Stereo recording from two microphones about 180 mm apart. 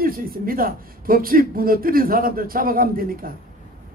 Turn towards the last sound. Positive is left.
turn(degrees=-55)  # may be behind; listen again after turning